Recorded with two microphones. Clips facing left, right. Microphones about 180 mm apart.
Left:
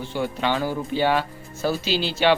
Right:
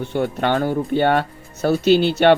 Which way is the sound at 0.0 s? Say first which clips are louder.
Right 5 dB; 60° right (ahead or behind).